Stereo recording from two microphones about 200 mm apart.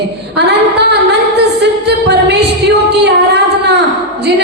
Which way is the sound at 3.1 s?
55° right (ahead or behind).